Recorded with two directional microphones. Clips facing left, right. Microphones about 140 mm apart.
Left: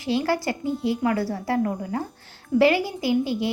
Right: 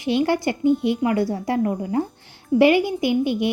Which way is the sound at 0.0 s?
20° right (ahead or behind).